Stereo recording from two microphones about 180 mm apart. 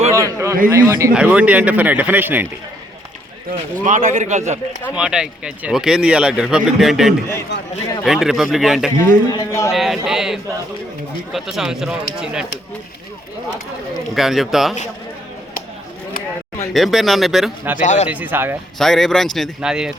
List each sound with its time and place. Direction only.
0.1 s a sound: 15° right (ahead or behind)
0.7 s speech: 15° right (ahead or behind)
1.1 s speech: 5° right (ahead or behind)
3.8 s a man's voice: 45° right (ahead or behind)
4.9 s speech: 5° right (ahead or behind)
9.0 s a man's voice: 20° left (ahead or behind)
9.7 s speech: centre (ahead or behind)
14.1 s speech: centre (ahead or behind)
16.7 s speech: centre (ahead or behind)
17.7 s speech: 40° left (ahead or behind)
18.1 s speech: 10° right (ahead or behind)
18.8 s speech: centre (ahead or behind)